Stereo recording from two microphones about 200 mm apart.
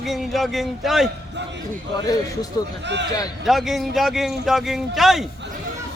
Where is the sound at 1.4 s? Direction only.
60° right (ahead or behind).